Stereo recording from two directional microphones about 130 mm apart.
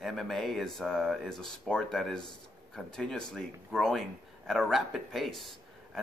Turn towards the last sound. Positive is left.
turn(degrees=0)  # may be behind; listen again after turning